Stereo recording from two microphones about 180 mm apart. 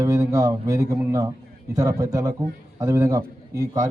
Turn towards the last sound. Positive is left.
turn(degrees=-20)  # may be behind; listen again after turning